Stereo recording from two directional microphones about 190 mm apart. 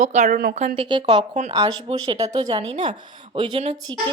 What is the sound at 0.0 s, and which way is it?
Speech, 40° right (ahead or behind).